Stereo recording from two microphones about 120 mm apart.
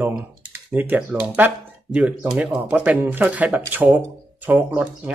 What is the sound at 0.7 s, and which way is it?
Speech, 15° right (ahead or behind).